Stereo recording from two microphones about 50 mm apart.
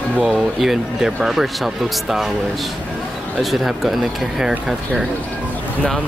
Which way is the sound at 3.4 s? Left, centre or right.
Centre.